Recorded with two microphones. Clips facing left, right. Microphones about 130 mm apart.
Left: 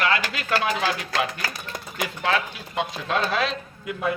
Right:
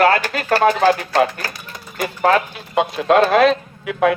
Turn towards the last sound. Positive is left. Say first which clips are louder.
# right 10 dB
turn(degrees=-80)